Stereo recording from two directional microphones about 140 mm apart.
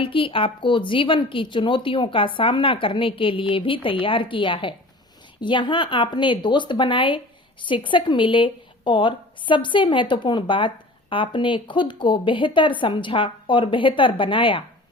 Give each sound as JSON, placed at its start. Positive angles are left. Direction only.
{"t": 0.0, "sound": "a woman's voice", "side_deg": 40}